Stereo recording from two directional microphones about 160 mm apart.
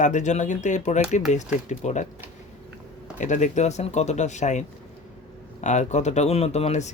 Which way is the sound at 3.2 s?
50° left (ahead or behind).